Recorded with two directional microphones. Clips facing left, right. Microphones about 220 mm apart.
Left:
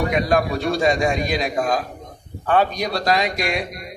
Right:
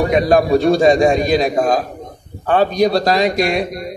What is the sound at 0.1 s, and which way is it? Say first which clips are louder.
A man's voice: right 7 dB; 35° right (ahead or behind).